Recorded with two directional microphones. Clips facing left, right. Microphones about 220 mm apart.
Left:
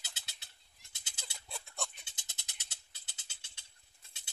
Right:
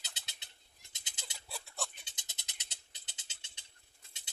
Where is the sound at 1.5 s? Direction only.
Centre (ahead or behind).